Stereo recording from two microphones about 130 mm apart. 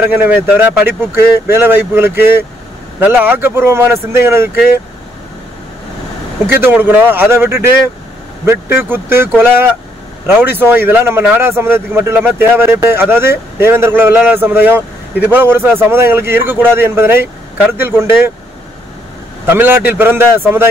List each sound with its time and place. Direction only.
0.0 s speech: 15° right (ahead or behind)
6.6 s speech: 15° right (ahead or behind)
19.4 s speech: 15° right (ahead or behind)